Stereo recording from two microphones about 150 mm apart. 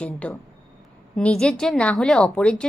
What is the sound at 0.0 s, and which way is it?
A woman's voice, 10° left (ahead or behind).